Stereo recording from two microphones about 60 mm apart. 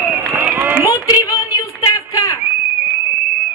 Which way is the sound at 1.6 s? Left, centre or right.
Left.